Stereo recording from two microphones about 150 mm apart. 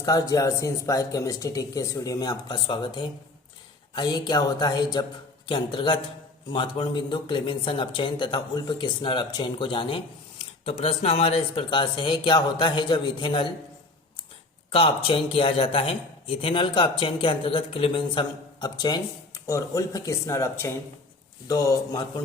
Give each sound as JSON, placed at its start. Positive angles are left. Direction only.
{"t": 0.0, "sound": "speech", "side_deg": 25}
{"t": 14.7, "sound": "speech", "side_deg": 40}